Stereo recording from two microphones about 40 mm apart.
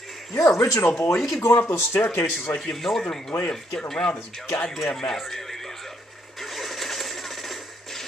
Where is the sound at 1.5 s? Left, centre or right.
Left.